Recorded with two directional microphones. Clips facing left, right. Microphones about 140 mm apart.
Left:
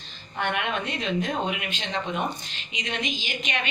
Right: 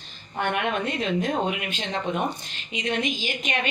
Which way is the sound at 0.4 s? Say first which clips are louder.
Right 2 dB; 45° right (ahead or behind).